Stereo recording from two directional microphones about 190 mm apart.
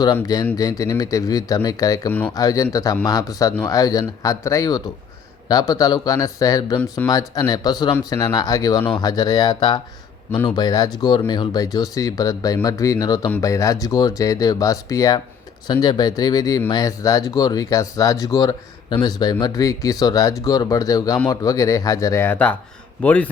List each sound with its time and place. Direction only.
0.2 s speech: 20° left (ahead or behind)